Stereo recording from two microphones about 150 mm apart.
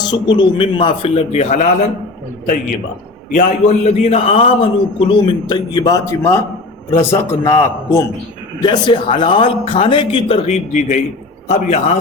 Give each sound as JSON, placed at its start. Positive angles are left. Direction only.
{"t": 0.0, "sound": "a man's voice", "side_deg": 30}
{"t": 3.3, "sound": "a man's voice", "side_deg": 55}
{"t": 5.5, "sound": "a man's voice", "side_deg": 30}
{"t": 8.6, "sound": "a man's voice", "side_deg": 30}